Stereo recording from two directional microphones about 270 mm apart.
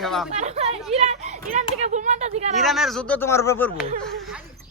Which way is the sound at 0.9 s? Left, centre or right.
Right.